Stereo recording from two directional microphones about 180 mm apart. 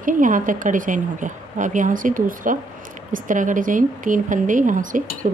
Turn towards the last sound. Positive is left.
turn(degrees=-45)  # may be behind; listen again after turning